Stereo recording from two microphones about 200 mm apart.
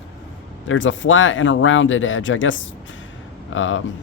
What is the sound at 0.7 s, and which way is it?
Speech, 75° left (ahead or behind).